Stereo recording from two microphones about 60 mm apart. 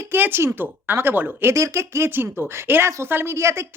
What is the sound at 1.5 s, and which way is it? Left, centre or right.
Speech, right.